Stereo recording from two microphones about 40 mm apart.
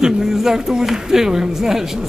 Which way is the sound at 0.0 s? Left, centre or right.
Centre.